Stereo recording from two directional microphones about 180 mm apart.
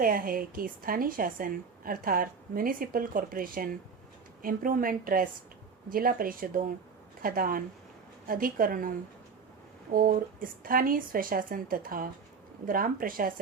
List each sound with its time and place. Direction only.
0.0 s a woman's voice: 50° right (ahead or behind)
9.9 s a woman's voice: 50° right (ahead or behind)